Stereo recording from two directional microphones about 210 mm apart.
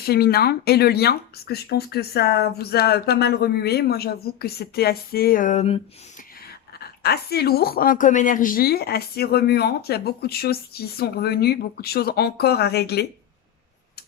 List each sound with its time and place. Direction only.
0.0 s a woman's voice: 50° left (ahead or behind); by 5.8 s 30° left (ahead or behind)
6.7 s a woman's voice: 50° left (ahead or behind)